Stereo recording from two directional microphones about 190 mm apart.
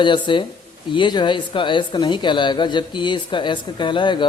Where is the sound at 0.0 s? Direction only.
25° left (ahead or behind).